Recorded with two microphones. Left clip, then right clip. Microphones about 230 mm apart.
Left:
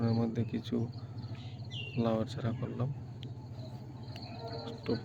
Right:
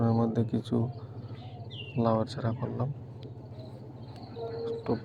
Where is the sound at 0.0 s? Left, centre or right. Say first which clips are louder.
Right 6 dB; centre.